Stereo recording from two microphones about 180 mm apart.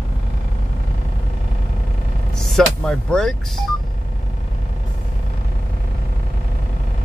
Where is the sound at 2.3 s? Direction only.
5° left (ahead or behind).